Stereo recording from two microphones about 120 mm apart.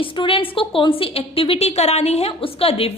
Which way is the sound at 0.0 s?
45° left (ahead or behind).